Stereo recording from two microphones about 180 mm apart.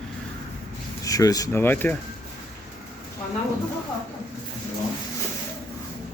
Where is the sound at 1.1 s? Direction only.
20° left (ahead or behind).